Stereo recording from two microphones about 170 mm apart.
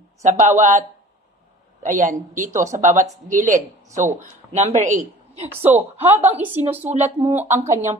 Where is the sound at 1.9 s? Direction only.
45° right (ahead or behind).